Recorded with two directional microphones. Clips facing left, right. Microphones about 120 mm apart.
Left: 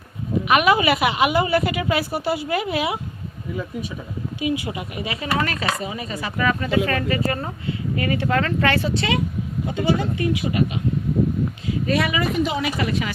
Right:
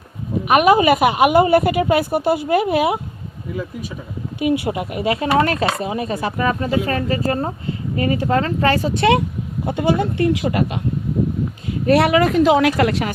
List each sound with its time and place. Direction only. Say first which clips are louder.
0.4 s a woman's voice: right 5 dB; 45° right (ahead or behind)
4.4 s a woman's voice: right 6 dB; 60° right (ahead or behind)
6.3 s speech: left 1 dB; 35° right (ahead or behind)
9.6 s speech: right 4 dB; 55° right (ahead or behind); by 10.7 s 75° right (ahead or behind)
11.9 s speech: right 9 dB; 70° right (ahead or behind)